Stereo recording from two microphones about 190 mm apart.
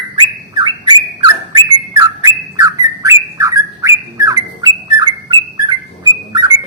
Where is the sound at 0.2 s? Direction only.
20° right (ahead or behind).